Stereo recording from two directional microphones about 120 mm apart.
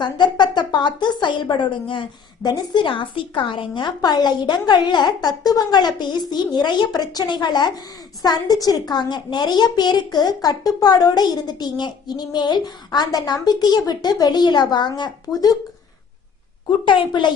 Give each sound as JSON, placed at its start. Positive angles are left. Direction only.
{"t": 0.0, "sound": "a woman's voice", "side_deg": 40}
{"t": 16.8, "sound": "a woman's voice", "side_deg": 45}